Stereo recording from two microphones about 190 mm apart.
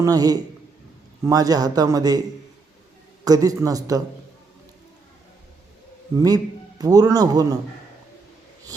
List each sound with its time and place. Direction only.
0.0 s a man's voice: 20° right (ahead or behind)
3.2 s a man's voice: 20° right (ahead or behind)
6.2 s a man's voice: 20° right (ahead or behind)